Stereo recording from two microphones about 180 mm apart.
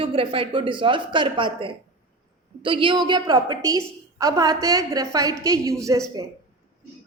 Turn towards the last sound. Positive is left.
turn(degrees=-20)  # may be behind; listen again after turning